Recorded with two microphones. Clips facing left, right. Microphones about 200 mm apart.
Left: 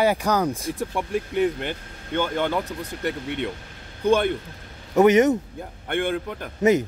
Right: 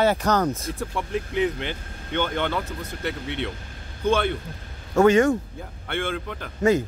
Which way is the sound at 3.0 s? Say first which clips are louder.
Left 2 dB; 45° left (ahead or behind).